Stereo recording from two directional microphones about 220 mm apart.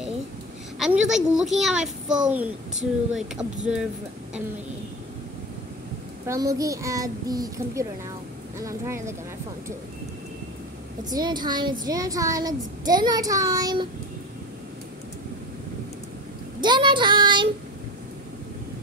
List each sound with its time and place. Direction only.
0.7 s a child's voice: centre (ahead or behind)
6.2 s a child's voice: 15° right (ahead or behind)
11.1 s child singing: 20° right (ahead or behind)
11.8 s a child's voice: 15° right (ahead or behind)
16.6 s child singing: 20° right (ahead or behind)